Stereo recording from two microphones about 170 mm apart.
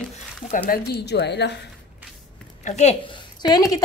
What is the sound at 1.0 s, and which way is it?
Speech, 85° left.